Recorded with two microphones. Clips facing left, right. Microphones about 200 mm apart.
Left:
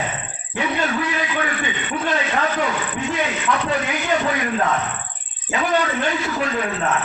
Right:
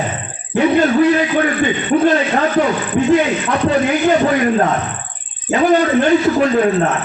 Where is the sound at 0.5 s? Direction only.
40° right (ahead or behind).